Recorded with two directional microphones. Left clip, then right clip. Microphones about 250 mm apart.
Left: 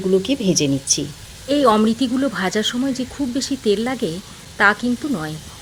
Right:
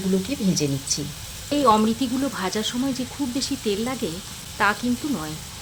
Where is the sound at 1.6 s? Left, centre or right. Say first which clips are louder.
Left 2 dB; centre.